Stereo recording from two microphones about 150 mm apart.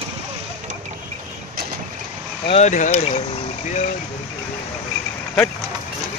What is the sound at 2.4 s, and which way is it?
Speech, 40° left (ahead or behind).